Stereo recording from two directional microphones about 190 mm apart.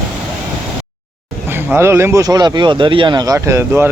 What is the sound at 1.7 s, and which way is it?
Speech, 10° right (ahead or behind).